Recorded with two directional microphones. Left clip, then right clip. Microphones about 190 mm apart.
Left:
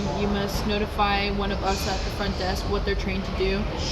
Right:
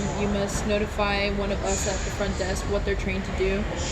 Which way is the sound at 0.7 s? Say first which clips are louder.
Left 2 dB; 5° left (ahead or behind).